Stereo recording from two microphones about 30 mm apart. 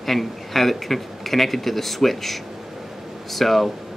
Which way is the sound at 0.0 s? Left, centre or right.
Centre.